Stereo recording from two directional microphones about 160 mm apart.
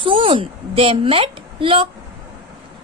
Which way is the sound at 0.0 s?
35° right (ahead or behind).